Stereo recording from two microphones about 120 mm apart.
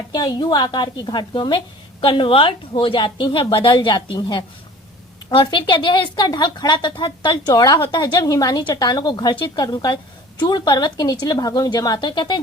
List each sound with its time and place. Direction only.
0.1 s a woman's voice: 35° left (ahead or behind)